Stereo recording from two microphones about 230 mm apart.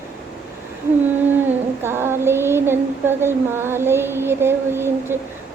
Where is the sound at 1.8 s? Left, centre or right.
Centre.